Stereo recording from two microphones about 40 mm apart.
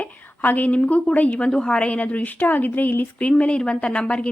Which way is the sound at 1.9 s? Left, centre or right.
Left.